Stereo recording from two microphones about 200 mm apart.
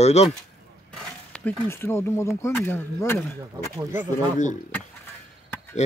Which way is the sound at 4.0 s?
40° left (ahead or behind).